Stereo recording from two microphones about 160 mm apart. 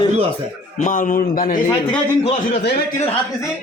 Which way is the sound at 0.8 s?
50° left (ahead or behind).